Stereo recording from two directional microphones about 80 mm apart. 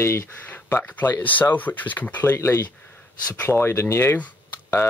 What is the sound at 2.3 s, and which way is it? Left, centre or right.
Speech, left.